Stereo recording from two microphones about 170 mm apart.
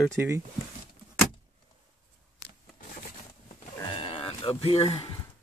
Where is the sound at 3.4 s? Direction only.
35° left (ahead or behind).